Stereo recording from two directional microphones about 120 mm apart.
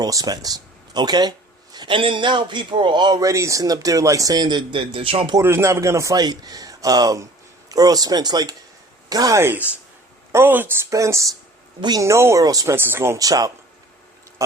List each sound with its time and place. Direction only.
0.0 s speech: 30° right (ahead or behind); by 5.4 s 45° right (ahead or behind)
5.4 s speech: 20° right (ahead or behind)
11.8 s speech: 35° right (ahead or behind)
12.0 s speech: 25° right (ahead or behind)